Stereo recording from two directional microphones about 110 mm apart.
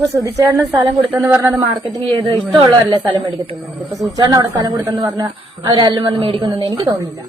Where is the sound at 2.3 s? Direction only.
45° right (ahead or behind).